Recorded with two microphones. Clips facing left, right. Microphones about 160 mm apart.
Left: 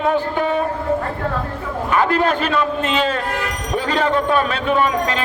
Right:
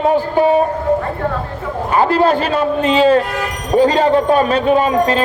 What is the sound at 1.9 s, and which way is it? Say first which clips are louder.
A man's voice: right 4 dB; 35° right (ahead or behind).